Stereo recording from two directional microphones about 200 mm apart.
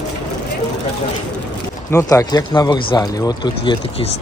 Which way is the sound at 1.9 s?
15° left (ahead or behind).